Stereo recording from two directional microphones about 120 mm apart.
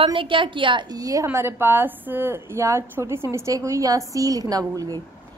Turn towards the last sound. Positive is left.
turn(degrees=-30)  # may be behind; listen again after turning